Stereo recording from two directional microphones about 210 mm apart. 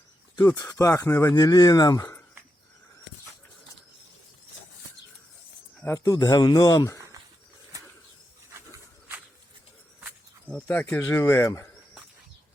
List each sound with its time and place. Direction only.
0.3 s speech: 20° left (ahead or behind)
5.8 s speech: 15° left (ahead or behind)
10.5 s speech: 10° left (ahead or behind)